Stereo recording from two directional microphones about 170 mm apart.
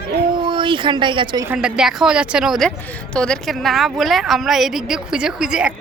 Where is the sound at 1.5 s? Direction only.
5° right (ahead or behind).